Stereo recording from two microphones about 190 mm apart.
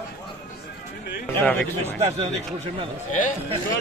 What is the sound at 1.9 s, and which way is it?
Speech, 35° right (ahead or behind).